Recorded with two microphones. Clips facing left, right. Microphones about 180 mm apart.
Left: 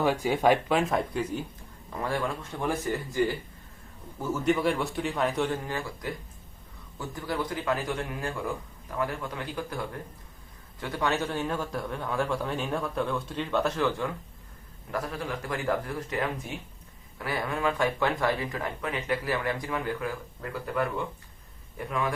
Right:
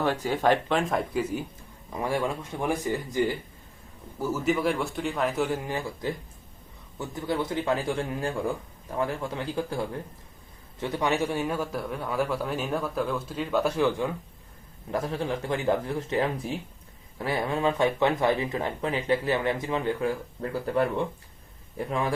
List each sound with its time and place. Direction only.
0.0 s a man's voice: 10° left (ahead or behind); by 3.3 s 15° right (ahead or behind)
4.2 s a man's voice: centre (ahead or behind)
14.8 s a man's voice: 25° right (ahead or behind)